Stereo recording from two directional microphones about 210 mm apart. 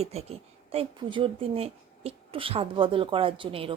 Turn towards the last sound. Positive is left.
turn(degrees=-25)  # may be behind; listen again after turning